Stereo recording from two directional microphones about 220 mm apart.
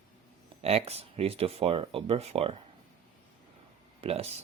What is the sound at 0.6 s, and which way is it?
Speech, 25° right (ahead or behind).